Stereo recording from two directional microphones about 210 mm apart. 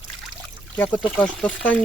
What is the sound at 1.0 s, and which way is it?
Speech, 5° right (ahead or behind).